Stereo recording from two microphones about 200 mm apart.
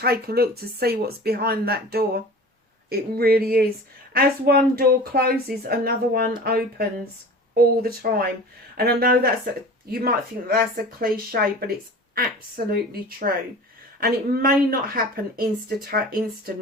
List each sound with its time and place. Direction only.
0.0 s speech: 50° right (ahead or behind)
12.7 s speech: 50° right (ahead or behind)